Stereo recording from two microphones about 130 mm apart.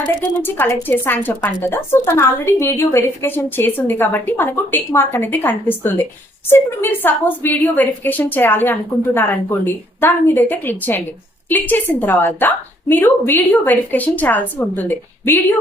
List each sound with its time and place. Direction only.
0.0 s a woman's voice: 15° left (ahead or behind)